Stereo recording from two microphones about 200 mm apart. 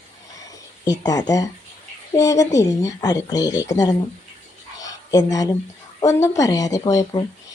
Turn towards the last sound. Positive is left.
turn(degrees=15)  # may be behind; listen again after turning